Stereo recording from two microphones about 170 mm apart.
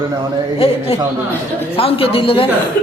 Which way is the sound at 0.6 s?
35° left (ahead or behind).